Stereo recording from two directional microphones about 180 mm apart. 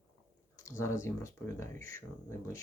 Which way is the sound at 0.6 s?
15° left (ahead or behind).